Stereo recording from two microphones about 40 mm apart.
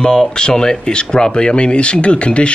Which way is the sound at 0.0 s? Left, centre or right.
Centre.